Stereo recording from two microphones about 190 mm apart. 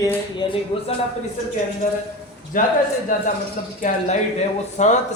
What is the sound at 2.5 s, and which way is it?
Speech, 45° left (ahead or behind).